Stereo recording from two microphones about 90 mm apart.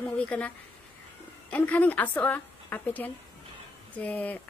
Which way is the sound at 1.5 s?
15° left (ahead or behind).